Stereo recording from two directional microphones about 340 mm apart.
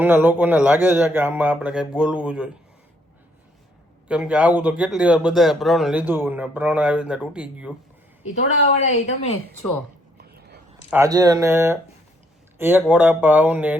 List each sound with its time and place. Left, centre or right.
0.0 s speech: centre
4.1 s speech: centre
8.6 s speech: centre
9.6 s speech: centre
10.2 s a sound: right
10.9 s speech: centre